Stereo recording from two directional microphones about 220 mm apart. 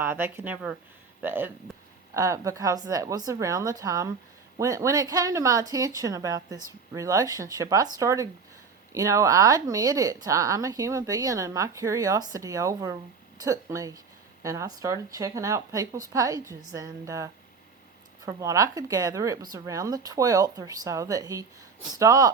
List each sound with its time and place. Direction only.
0.0 s speech: 10° right (ahead or behind)